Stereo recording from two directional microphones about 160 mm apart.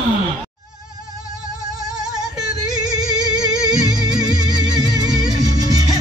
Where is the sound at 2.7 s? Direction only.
25° right (ahead or behind).